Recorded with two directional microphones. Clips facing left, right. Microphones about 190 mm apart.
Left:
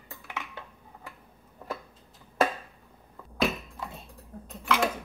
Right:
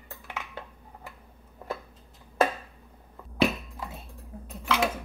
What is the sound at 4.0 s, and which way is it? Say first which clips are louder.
Dishes: right 1 dB; 5° right (ahead or behind).